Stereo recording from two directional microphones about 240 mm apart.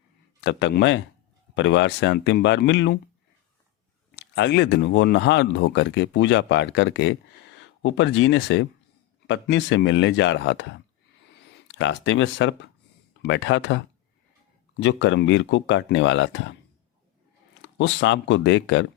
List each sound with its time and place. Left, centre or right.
0.4 s speech: left
4.1 s speech: left
17.6 s speech: left